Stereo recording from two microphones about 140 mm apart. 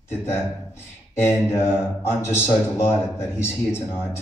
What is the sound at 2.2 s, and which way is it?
Speech, 15° left (ahead or behind).